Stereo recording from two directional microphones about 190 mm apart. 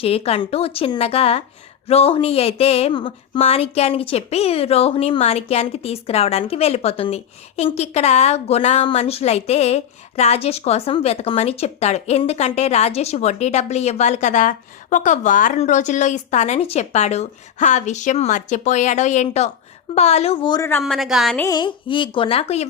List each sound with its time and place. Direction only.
0.0 s speech: 30° left (ahead or behind)
20.8 s a woman's voice: centre (ahead or behind)
21.4 s speech: 25° left (ahead or behind)